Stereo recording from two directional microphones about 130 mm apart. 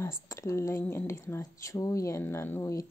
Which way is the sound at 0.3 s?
25° left (ahead or behind).